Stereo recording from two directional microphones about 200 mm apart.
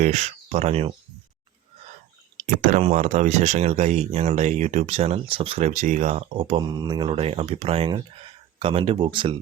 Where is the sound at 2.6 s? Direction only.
40° right (ahead or behind).